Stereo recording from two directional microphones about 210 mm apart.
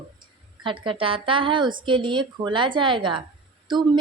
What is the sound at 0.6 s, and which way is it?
A woman's voice, 25° right (ahead or behind).